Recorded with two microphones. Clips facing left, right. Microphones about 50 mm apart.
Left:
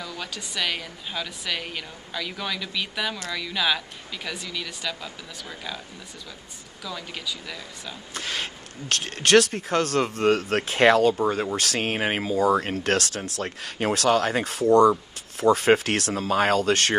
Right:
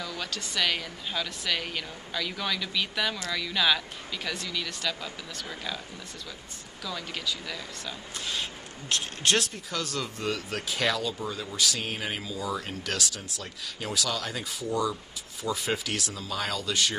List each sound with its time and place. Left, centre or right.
0.0 s speech: centre
6.8 s speech: centre
8.1 s speech: left